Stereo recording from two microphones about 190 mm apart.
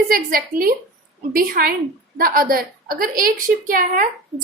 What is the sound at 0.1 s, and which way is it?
A woman's voice, 50° right (ahead or behind).